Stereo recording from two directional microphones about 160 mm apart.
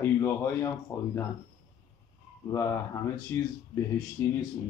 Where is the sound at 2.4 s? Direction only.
20° left (ahead or behind).